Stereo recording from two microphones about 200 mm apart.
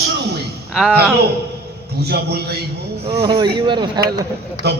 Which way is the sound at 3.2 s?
25° right (ahead or behind).